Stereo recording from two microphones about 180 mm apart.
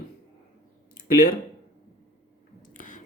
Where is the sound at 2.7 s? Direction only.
45° left (ahead or behind).